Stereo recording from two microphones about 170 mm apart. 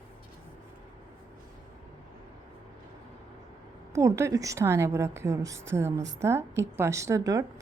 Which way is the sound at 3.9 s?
15° right (ahead or behind).